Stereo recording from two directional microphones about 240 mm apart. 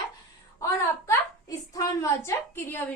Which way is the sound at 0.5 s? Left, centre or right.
Centre.